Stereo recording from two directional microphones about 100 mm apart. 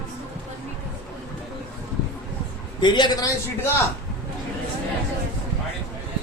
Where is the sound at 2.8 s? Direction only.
50° left (ahead or behind).